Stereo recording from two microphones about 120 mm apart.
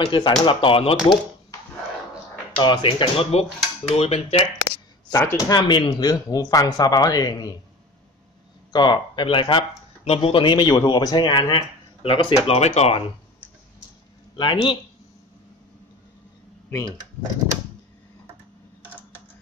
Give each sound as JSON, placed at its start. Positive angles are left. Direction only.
{"t": 0.0, "sound": "speech", "side_deg": 45}
{"t": 2.5, "sound": "speech", "side_deg": 40}
{"t": 5.1, "sound": "speech", "side_deg": 20}
{"t": 5.5, "sound": "speech", "side_deg": 40}
{"t": 8.7, "sound": "speech", "side_deg": 40}
{"t": 12.5, "sound": "speech", "side_deg": 60}
{"t": 14.3, "sound": "speech", "side_deg": 45}